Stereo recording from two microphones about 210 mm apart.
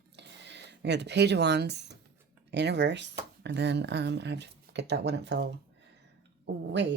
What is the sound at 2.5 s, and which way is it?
Speech, 55° right (ahead or behind).